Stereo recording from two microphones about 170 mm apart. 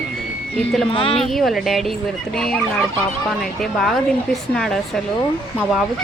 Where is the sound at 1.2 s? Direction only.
Centre (ahead or behind).